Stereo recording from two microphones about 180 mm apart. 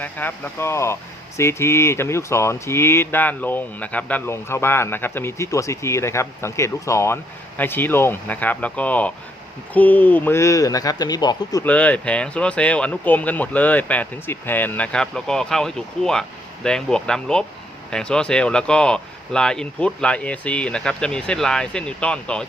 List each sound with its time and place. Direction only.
0.0 s speech: 10° left (ahead or behind)
11.6 s speech: 10° left (ahead or behind)